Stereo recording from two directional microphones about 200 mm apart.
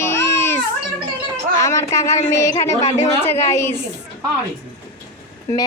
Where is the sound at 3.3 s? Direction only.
30° left (ahead or behind).